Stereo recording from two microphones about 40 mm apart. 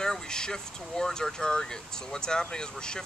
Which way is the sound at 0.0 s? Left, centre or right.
Centre.